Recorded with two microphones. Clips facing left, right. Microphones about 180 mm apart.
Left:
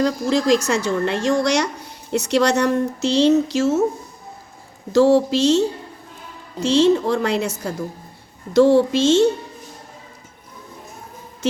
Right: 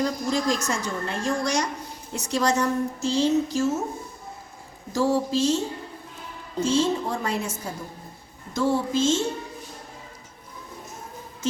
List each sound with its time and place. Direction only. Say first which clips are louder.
0.0 s a woman's voice: left 6 dB; 80° left
4.9 s a woman's voice: left 9 dB; 80° left